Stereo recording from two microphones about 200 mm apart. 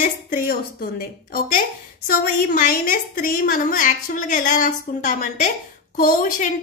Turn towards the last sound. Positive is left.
turn(degrees=40)  # may be behind; listen again after turning